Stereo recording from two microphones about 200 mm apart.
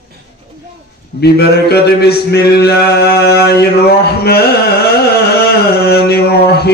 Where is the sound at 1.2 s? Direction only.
55° left (ahead or behind).